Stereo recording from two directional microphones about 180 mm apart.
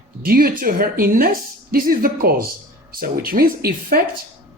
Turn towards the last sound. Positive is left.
turn(degrees=-55)  # may be behind; listen again after turning